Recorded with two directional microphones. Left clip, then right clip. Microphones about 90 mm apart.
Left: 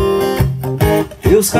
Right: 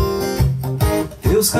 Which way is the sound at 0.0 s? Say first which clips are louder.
Left 6 dB; 30° left (ahead or behind).